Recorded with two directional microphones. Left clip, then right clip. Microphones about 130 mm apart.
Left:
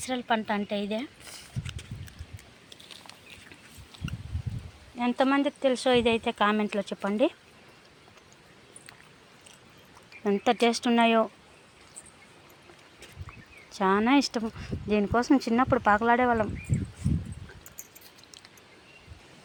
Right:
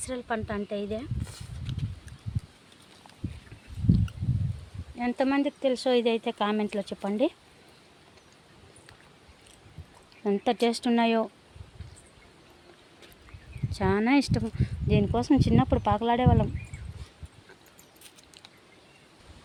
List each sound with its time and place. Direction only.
0.0 s a woman's voice: 5° left (ahead or behind)
4.9 s speech: 10° right (ahead or behind)
10.2 s speech: 10° right (ahead or behind)
13.7 s speech: 15° right (ahead or behind)
17.0 s a sound: 70° left (ahead or behind)